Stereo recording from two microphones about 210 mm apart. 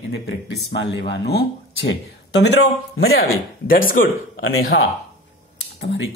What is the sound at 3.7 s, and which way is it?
Speech, 40° left (ahead or behind).